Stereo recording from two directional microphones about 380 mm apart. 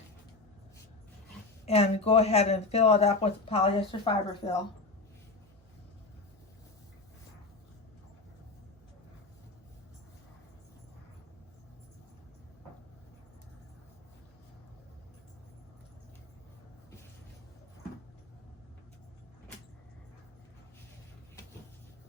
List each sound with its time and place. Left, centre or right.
1.6 s speech: centre